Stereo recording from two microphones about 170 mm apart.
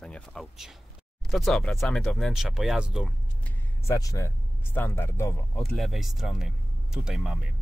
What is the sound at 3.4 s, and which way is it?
Speech, 15° left (ahead or behind).